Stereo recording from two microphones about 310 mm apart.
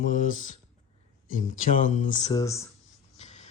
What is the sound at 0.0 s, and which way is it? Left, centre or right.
Mantra, left.